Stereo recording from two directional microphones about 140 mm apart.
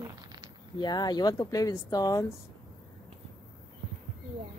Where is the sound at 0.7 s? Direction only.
30° left (ahead or behind).